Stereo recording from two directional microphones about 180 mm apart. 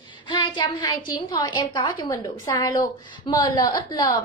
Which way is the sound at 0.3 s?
25° left (ahead or behind).